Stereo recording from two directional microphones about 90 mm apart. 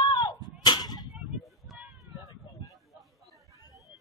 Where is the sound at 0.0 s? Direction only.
55° left (ahead or behind).